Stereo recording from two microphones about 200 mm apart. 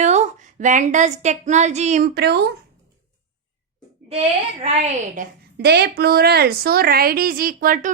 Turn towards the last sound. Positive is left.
turn(degrees=-45)  # may be behind; listen again after turning